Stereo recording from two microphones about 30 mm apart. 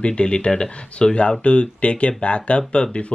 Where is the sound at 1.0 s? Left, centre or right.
Left.